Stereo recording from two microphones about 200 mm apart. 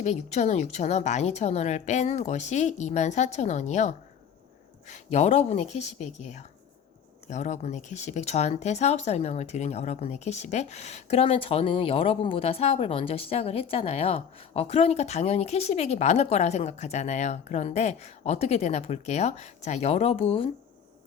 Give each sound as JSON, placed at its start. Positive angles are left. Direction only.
{"t": 0.0, "sound": "speech", "side_deg": 35}